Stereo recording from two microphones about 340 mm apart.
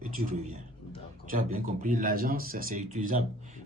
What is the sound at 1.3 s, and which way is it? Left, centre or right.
Speech, right.